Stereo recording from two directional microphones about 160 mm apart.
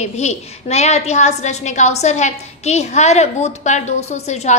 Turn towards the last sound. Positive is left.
turn(degrees=45)  # may be behind; listen again after turning